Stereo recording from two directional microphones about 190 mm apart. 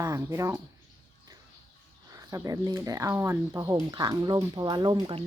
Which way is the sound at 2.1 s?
15° right (ahead or behind).